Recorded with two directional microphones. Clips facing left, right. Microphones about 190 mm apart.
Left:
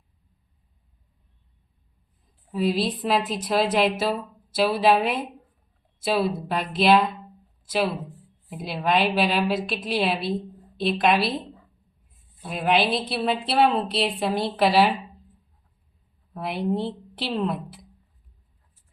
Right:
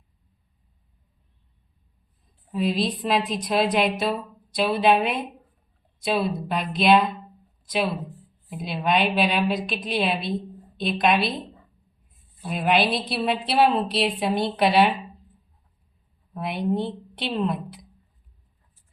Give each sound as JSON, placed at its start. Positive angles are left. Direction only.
{"t": 2.5, "sound": "a woman's voice", "side_deg": 0}
{"t": 8.4, "sound": "a woman's voice", "side_deg": 0}
{"t": 12.5, "sound": "a woman's voice", "side_deg": 0}
{"t": 16.3, "sound": "a woman's voice", "side_deg": 0}